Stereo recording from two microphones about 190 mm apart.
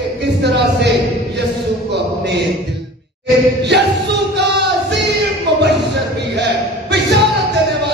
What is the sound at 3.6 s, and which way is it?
Music, 65° right (ahead or behind).